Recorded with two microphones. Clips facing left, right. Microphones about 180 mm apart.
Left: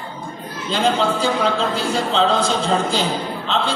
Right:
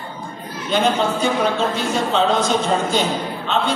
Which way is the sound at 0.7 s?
30° left (ahead or behind).